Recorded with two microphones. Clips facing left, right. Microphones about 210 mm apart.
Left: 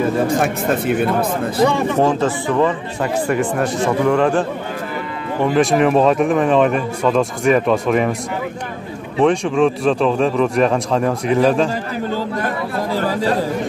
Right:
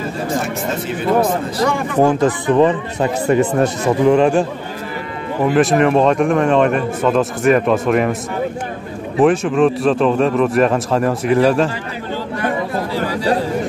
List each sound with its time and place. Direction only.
0.0 s speech: 55° left (ahead or behind)
2.0 s speech: 15° right (ahead or behind)
5.4 s speech: centre (ahead or behind)
9.2 s speech: 5° right (ahead or behind)
12.9 s chatter: 45° left (ahead or behind)